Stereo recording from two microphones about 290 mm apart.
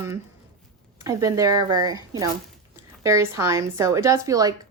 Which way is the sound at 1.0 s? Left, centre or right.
Centre.